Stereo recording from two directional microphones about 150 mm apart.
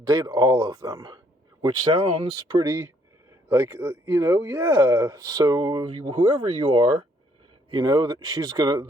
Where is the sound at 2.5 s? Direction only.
20° right (ahead or behind).